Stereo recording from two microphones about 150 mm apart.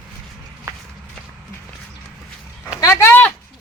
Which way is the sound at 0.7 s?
20° right (ahead or behind).